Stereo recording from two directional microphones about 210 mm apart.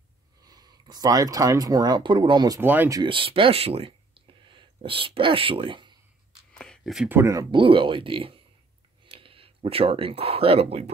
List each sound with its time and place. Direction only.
0.5 s speech: 20° right (ahead or behind)
3.0 s speech: 25° right (ahead or behind)
6.5 s speech: 5° left (ahead or behind); by 10.9 s 30° right (ahead or behind)